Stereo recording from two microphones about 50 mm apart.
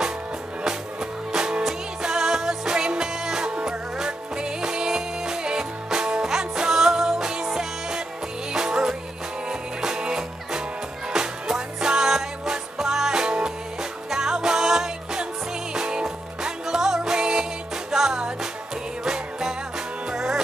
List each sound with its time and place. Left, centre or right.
1.3 s music: centre
20.1 s music: centre